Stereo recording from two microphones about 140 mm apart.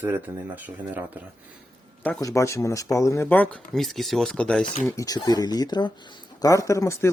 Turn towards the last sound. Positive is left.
turn(degrees=20)  # may be behind; listen again after turning